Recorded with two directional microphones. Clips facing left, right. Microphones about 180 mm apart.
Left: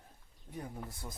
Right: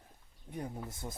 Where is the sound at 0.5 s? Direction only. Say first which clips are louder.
Right 3 dB; 20° right (ahead or behind).